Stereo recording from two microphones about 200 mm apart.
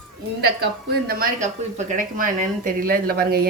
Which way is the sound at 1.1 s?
40° right (ahead or behind).